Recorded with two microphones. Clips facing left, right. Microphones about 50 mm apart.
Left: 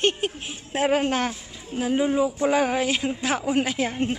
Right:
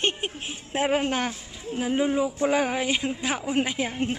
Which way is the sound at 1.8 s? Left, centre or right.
Centre.